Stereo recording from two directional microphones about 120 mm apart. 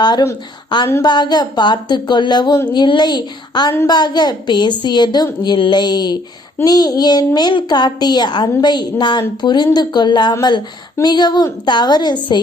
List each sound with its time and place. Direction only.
0.0 s a woman's voice: 35° left (ahead or behind)